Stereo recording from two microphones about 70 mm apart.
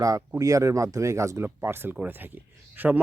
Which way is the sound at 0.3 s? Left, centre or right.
Right.